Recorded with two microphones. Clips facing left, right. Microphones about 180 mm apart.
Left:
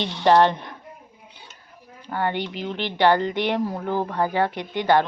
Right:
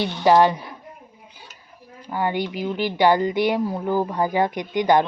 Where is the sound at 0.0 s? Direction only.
10° right (ahead or behind).